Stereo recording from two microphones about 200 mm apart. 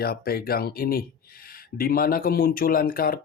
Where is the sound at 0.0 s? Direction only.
50° left (ahead or behind).